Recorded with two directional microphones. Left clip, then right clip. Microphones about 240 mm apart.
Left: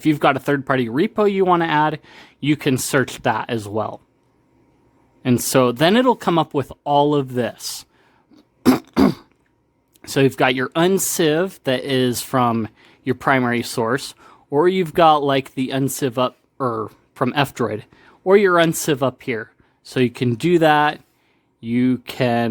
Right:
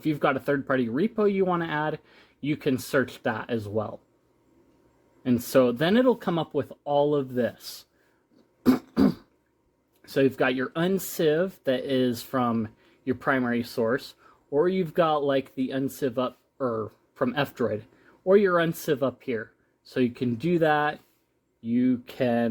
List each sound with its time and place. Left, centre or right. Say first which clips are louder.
0.0 s speech: left 8 dB; left
5.2 s speech: left 5 dB; left
8.6 s throat clearing: left 7 dB; left
10.0 s speech: left 7 dB; left